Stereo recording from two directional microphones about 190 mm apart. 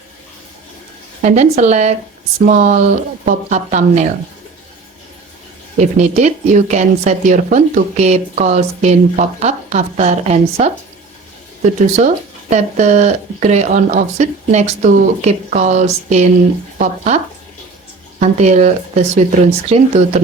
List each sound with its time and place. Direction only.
1.2 s speech: 40° right (ahead or behind)
5.8 s speech: 35° right (ahead or behind)
11.9 s speech: 40° right (ahead or behind)
18.2 s speech: 35° right (ahead or behind)